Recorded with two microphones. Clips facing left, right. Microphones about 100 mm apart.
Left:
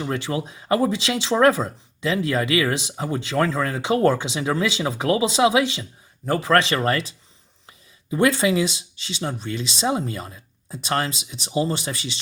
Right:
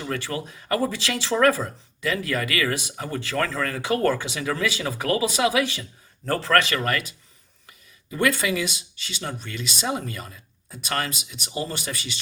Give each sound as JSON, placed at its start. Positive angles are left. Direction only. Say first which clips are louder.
{"t": 0.0, "sound": "speech", "louder": "left 4 dB", "side_deg": 20}